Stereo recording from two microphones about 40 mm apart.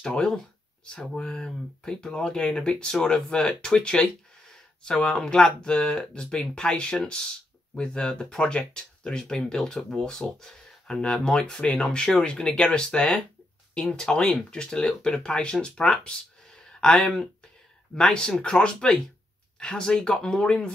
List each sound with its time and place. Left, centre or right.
0.0 s speech: left